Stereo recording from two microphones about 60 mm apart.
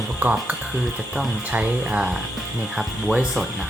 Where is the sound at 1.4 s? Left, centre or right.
Right.